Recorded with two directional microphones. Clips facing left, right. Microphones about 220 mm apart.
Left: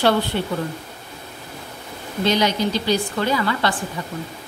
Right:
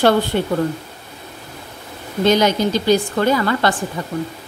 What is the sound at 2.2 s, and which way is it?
A woman's voice, 50° right (ahead or behind).